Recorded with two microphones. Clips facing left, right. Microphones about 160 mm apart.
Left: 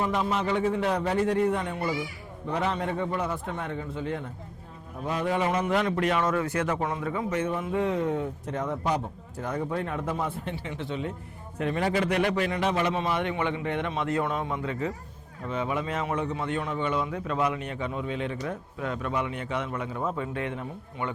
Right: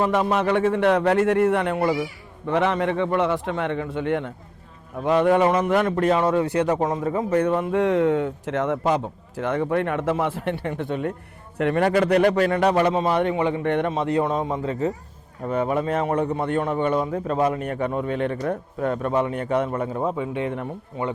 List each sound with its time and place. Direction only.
0.0 s a man's voice: 70° right (ahead or behind)
5.0 s a sound: 65° right (ahead or behind)
6.0 s speech: 30° right (ahead or behind)
7.4 s a man's voice: 70° right (ahead or behind); by 11.1 s 55° right (ahead or behind)
11.5 s a sound: 65° right (ahead or behind)
12.0 s speech: 40° right (ahead or behind)
12.3 s a sound: 55° right (ahead or behind)
12.9 s speech: 35° right (ahead or behind)
13.6 s a sound: 60° right (ahead or behind)
14.3 s speech: 35° right (ahead or behind)
15.4 s speech: 50° right (ahead or behind)
20.1 s speech: 15° right (ahead or behind)